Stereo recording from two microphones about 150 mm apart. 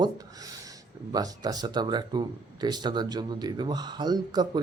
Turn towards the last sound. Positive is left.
turn(degrees=-30)  # may be behind; listen again after turning